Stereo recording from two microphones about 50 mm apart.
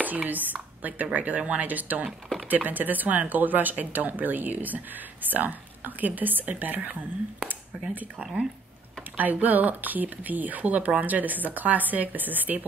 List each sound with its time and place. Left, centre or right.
0.0 s speech: right
9.1 s speech: right